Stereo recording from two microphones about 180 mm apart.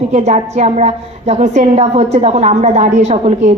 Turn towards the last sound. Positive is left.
turn(degrees=-35)  # may be behind; listen again after turning